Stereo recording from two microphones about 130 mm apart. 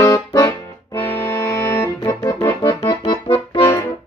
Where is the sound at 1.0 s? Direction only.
15° left (ahead or behind).